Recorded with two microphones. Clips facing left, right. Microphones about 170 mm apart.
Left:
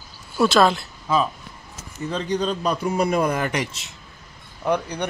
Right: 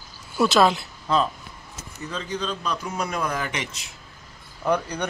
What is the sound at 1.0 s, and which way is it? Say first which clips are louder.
Speech: left 1 dB; 5° left (ahead or behind).